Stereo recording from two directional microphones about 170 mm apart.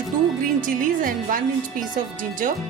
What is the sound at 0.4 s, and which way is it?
Speech, 55° right (ahead or behind).